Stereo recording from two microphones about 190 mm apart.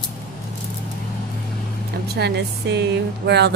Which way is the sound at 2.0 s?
60° right (ahead or behind).